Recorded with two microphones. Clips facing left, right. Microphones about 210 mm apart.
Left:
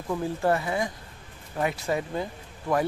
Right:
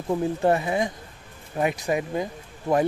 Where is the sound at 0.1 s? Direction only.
20° right (ahead or behind).